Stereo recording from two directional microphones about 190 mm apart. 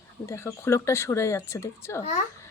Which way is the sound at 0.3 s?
15° left (ahead or behind).